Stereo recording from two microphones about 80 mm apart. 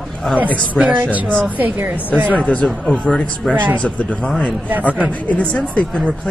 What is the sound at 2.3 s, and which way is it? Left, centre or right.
Speech, centre.